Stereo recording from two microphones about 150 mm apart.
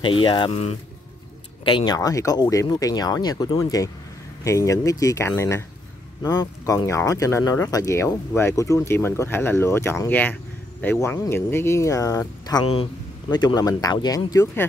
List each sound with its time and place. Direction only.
0.0 s speech: 35° left (ahead or behind)
0.5 s speech: 45° left (ahead or behind)
1.6 s speech: 35° left (ahead or behind)
2.0 s speech: 20° left (ahead or behind)